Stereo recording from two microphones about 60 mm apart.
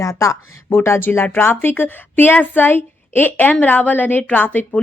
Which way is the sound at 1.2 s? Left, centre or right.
Left.